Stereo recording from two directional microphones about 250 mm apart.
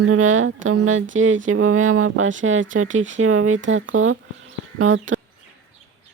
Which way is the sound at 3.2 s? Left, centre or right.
Right.